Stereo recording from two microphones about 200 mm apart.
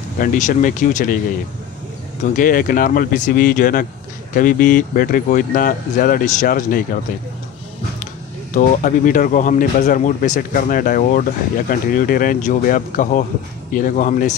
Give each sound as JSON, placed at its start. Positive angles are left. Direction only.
{"t": 0.2, "sound": "speech", "side_deg": 40}
{"t": 2.3, "sound": "speech", "side_deg": 45}
{"t": 8.5, "sound": "speech", "side_deg": 40}